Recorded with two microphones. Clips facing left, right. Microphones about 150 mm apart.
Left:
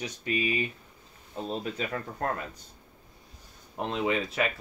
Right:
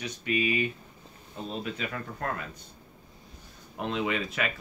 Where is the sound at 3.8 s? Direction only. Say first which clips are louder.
Left 1 dB; 35° left (ahead or behind).